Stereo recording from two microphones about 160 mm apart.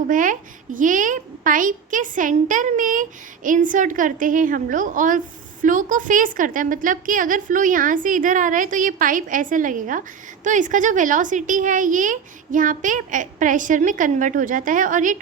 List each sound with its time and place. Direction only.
0.1 s a woman's voice: 55° right (ahead or behind)